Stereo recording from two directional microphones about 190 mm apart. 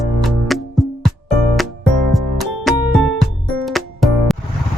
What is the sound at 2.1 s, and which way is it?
Music, centre (ahead or behind).